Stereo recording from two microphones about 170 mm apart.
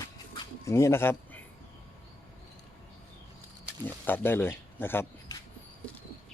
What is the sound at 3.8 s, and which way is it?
Speech, 10° left (ahead or behind).